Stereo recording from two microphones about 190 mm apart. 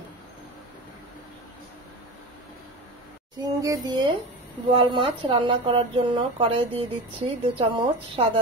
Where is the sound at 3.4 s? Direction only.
20° right (ahead or behind).